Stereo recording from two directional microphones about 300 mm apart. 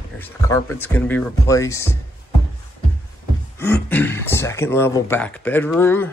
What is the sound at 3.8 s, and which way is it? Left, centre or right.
Speech, centre.